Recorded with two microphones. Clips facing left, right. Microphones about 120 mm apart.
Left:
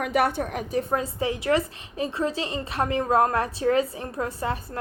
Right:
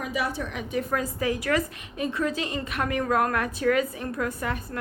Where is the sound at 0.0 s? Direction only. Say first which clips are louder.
Left 6 dB; 60° left (ahead or behind).